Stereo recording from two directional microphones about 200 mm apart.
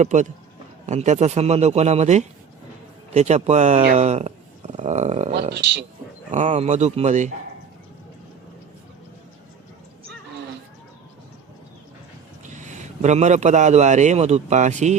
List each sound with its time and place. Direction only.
0.0 s a man's voice: 35° right (ahead or behind)
5.5 s speech: 60° right (ahead or behind)
6.3 s a man's voice: 35° right (ahead or behind)
12.5 s a man's voice: 35° right (ahead or behind)